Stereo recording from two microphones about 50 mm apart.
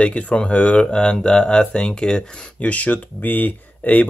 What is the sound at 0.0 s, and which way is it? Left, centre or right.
Speech, left.